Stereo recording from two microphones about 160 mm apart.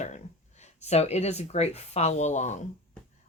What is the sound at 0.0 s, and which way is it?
Speech, 45° left (ahead or behind).